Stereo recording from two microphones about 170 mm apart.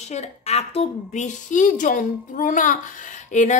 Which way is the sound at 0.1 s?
40° left (ahead or behind).